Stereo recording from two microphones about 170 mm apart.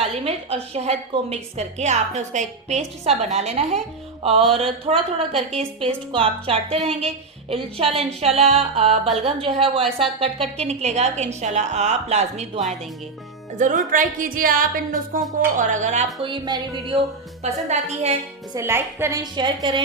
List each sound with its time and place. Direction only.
0.0 s a woman's voice: 35° right (ahead or behind)
4.2 s music: 35° right (ahead or behind)
4.5 s a woman's voice: 35° right (ahead or behind)
16.2 s a woman's voice: 30° right (ahead or behind)
17.7 s a woman's voice: 40° right (ahead or behind)
18.5 s a woman's voice: 15° right (ahead or behind)